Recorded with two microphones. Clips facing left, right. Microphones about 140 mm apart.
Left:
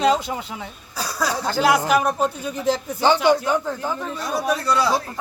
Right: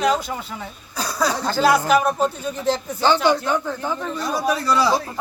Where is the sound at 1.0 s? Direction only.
Centre (ahead or behind).